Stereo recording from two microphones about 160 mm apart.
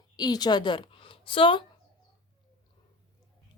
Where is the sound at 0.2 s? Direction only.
25° left (ahead or behind).